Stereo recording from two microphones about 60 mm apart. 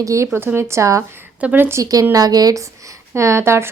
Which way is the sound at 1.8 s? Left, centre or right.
Right.